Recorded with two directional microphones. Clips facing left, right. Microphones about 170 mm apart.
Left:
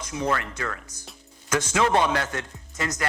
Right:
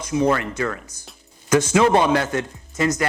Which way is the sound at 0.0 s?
10° right (ahead or behind).